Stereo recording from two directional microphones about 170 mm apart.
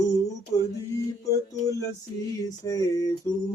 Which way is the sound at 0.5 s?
20° left (ahead or behind).